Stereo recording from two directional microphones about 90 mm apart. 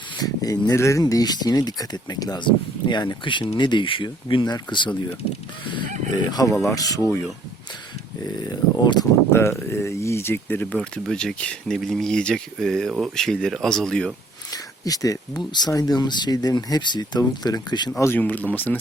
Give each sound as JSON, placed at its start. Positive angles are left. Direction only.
{"t": 0.2, "sound": "speech", "side_deg": 45}
{"t": 1.0, "sound": "speech", "side_deg": 45}
{"t": 6.5, "sound": "speech", "side_deg": 35}
{"t": 8.3, "sound": "speech", "side_deg": 50}
{"t": 9.3, "sound": "speech", "side_deg": 30}
{"t": 10.8, "sound": "speech", "side_deg": 10}
{"t": 14.5, "sound": "speech", "side_deg": 45}
{"t": 18.2, "sound": "speech", "side_deg": 20}